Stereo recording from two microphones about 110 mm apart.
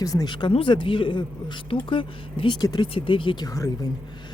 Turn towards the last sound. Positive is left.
turn(degrees=35)  # may be behind; listen again after turning